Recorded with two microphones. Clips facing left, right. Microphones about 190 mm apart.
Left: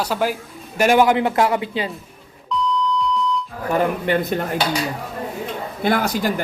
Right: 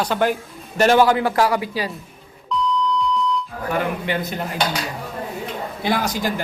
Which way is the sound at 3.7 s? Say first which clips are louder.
Left 4 dB; 50° left (ahead or behind).